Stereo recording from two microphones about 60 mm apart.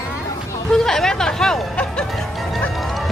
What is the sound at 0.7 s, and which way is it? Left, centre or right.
Speech, centre.